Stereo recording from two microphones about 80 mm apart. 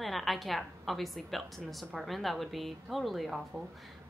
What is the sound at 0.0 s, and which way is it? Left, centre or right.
A woman's voice, centre.